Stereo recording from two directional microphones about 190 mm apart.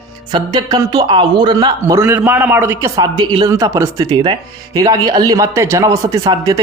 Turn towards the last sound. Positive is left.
turn(degrees=-20)  # may be behind; listen again after turning